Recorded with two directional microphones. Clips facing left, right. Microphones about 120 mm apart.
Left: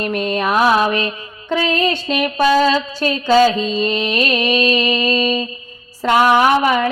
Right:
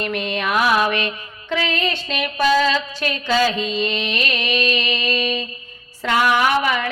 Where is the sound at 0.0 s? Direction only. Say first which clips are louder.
Left 4 dB; 40° left (ahead or behind).